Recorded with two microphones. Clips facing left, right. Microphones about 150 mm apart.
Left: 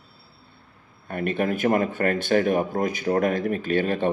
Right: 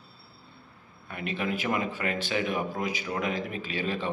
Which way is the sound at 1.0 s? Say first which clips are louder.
Left 7 dB; 50° left (ahead or behind).